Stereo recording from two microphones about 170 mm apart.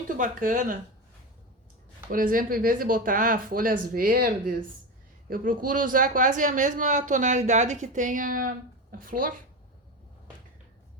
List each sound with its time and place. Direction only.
0.2 s speech: 50° right (ahead or behind)
2.0 s speech: 55° right (ahead or behind)